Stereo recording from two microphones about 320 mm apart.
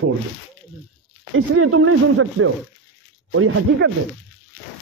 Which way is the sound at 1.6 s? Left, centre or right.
Right.